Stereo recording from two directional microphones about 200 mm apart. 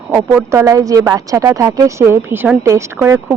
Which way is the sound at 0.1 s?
10° right (ahead or behind).